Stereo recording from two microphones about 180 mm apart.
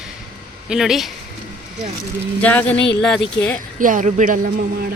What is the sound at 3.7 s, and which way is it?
Speech, 45° right (ahead or behind).